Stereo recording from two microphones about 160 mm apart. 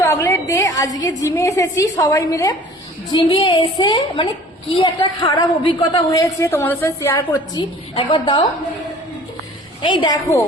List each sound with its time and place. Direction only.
0.0 s a woman's voice: 20° left (ahead or behind)
3.1 s a woman's voice: 30° left (ahead or behind)
7.9 s a woman's voice: 30° left (ahead or behind)
9.8 s a woman's voice: 30° left (ahead or behind)